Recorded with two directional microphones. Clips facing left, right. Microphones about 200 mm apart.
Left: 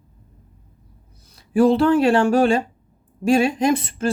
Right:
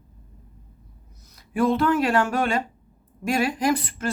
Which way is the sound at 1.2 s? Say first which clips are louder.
Left 7 dB; 30° left (ahead or behind).